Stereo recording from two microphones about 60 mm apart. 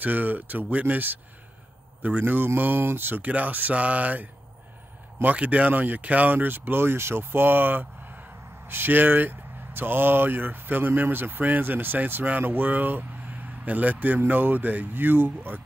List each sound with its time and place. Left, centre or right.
0.0 s speech: right